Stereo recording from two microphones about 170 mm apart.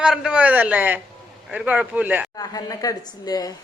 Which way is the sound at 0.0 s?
5° right (ahead or behind).